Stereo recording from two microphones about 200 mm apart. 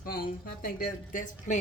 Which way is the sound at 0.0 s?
45° left (ahead or behind).